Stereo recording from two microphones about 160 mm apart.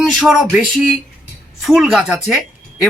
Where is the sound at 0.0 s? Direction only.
Centre (ahead or behind).